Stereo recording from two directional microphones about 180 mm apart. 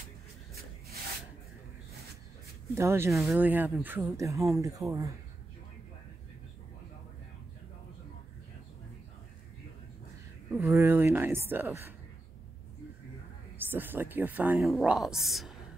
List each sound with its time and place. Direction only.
2.7 s speech: 15° right (ahead or behind)
10.6 s speech: 15° right (ahead or behind)
13.7 s speech: 10° right (ahead or behind)